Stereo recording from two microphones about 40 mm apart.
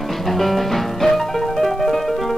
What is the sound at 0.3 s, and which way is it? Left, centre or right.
Music, centre.